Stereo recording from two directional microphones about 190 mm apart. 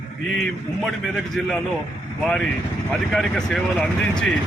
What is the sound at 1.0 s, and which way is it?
Speech, centre (ahead or behind).